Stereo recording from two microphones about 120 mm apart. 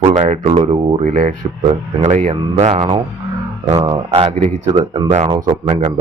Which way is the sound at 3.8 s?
45° right (ahead or behind).